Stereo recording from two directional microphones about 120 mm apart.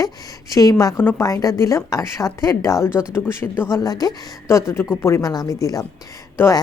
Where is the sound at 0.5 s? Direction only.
30° left (ahead or behind).